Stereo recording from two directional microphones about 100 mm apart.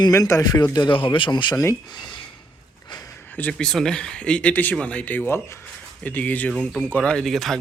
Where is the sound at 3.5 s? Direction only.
5° left (ahead or behind).